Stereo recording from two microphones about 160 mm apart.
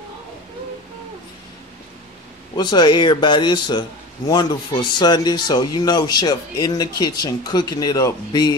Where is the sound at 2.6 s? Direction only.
25° left (ahead or behind).